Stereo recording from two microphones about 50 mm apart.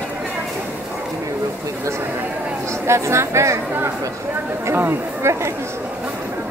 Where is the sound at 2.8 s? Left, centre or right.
Right.